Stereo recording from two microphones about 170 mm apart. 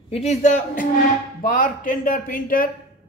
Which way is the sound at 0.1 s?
40° left (ahead or behind).